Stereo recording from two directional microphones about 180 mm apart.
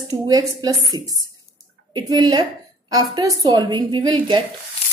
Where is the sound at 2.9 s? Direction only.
20° right (ahead or behind).